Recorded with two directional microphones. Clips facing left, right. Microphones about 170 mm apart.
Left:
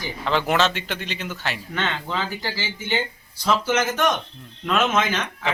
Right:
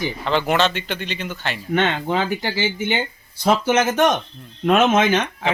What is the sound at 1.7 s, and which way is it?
Speech, 55° right (ahead or behind).